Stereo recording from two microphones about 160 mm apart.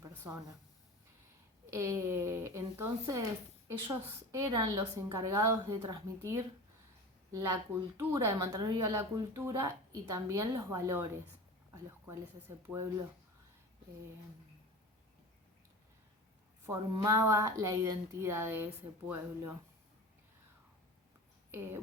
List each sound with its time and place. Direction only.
0.0 s a sound: 15° right (ahead or behind)
1.7 s a woman's voice: 15° right (ahead or behind)
16.6 s a woman's voice: 20° right (ahead or behind)